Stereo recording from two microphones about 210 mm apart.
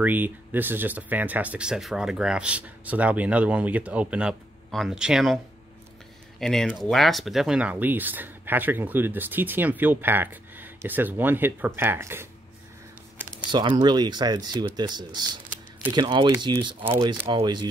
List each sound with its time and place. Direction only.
0.0 s speech: 10° right (ahead or behind)
6.4 s speech: centre (ahead or behind)
13.5 s speech: 20° right (ahead or behind)